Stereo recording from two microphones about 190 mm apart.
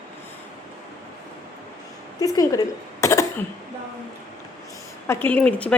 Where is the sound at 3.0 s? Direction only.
15° left (ahead or behind).